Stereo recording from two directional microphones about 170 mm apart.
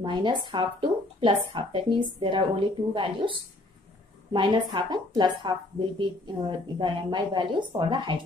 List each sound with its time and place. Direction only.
0.0 s speech: 25° right (ahead or behind)